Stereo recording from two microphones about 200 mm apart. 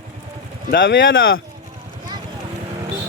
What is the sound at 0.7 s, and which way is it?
Speech, 70° left (ahead or behind).